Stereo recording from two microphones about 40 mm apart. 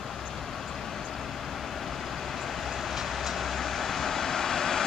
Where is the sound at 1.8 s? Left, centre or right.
Centre.